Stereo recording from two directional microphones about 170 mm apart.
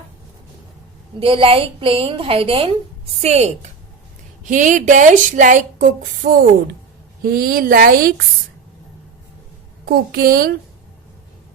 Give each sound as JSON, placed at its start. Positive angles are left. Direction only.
{"t": 1.2, "sound": "a woman's voice", "side_deg": -30}
{"t": 9.8, "sound": "speech", "side_deg": -65}